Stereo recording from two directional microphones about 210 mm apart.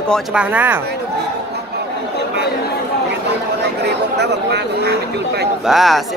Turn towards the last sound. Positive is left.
turn(degrees=0)  # may be behind; listen again after turning